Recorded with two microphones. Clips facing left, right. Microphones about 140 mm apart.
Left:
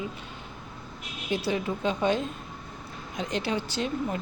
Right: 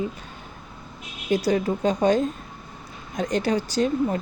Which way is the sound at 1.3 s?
40° right (ahead or behind).